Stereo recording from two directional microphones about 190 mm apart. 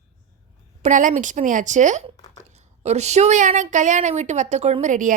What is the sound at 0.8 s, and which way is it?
A woman's voice, 40° right (ahead or behind).